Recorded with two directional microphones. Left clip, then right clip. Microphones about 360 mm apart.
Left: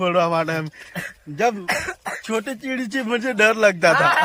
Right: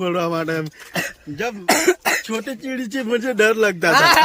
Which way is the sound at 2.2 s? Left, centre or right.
Centre.